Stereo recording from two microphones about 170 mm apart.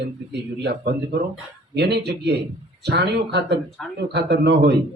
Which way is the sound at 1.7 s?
75° right (ahead or behind).